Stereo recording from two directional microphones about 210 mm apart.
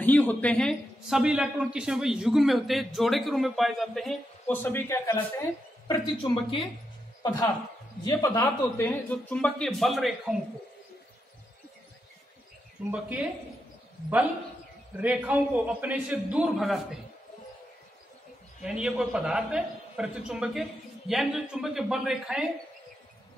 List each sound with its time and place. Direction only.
0.0 s speech: 10° left (ahead or behind)
6.3 s a woman's voice: 25° left (ahead or behind)
7.2 s speech: 15° left (ahead or behind)
12.9 s speech: 5° right (ahead or behind)
15.0 s a man's voice: 5° right (ahead or behind)
18.6 s speech: 5° right (ahead or behind)